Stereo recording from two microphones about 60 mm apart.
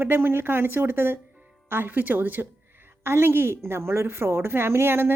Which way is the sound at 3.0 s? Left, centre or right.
Right.